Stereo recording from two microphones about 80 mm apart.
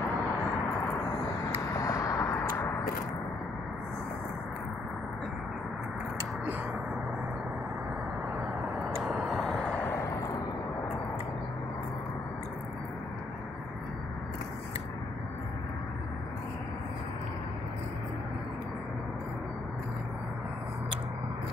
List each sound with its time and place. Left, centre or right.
1.7 s vehicle: left
9.0 s vehicle: centre
9.6 s vehicle: centre